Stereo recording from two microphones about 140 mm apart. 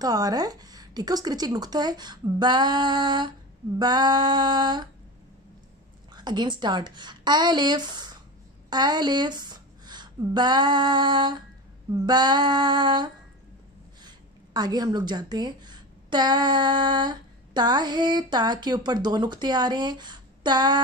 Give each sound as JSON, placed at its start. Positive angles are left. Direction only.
{"t": 0.0, "sound": "a woman's voice", "side_deg": -25}
{"t": 6.1, "sound": "a woman's voice", "side_deg": -30}